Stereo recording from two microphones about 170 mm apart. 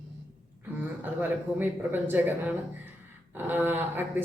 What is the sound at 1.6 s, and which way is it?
Speech, 10° right (ahead or behind).